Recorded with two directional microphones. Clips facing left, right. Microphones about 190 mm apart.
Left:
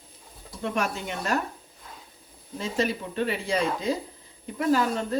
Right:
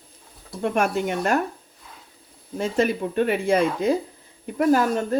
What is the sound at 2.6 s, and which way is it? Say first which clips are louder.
Speech: right 6 dB; 55° right (ahead or behind).